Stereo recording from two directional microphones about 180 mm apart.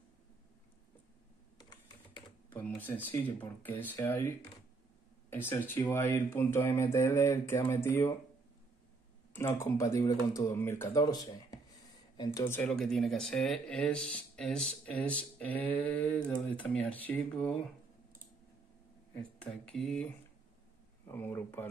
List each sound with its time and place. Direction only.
3.1 s speech: 10° left (ahead or behind)
5.3 s speech: 10° left (ahead or behind)
9.4 s speech: 15° left (ahead or behind)
19.1 s speech: 5° left (ahead or behind)
21.1 s speech: 10° left (ahead or behind)